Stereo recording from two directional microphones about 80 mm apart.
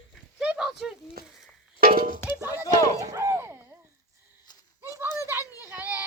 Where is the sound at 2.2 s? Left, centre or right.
Left.